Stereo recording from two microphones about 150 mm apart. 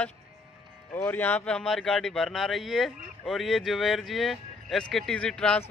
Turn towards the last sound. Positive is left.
turn(degrees=5)  # may be behind; listen again after turning